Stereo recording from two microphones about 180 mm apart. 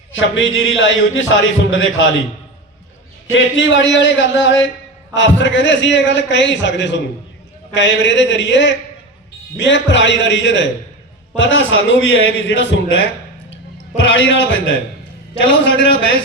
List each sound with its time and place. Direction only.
0.1 s a man's voice: 90° left
3.3 s a man's voice: 90° left